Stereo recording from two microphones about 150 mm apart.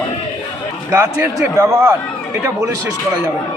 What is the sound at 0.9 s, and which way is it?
Speech, 15° right (ahead or behind).